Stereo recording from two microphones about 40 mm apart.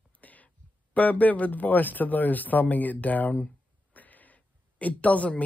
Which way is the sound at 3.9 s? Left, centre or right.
Left.